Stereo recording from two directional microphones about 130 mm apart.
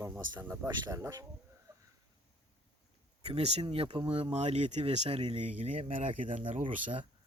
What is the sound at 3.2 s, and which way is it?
Speech, 50° right (ahead or behind).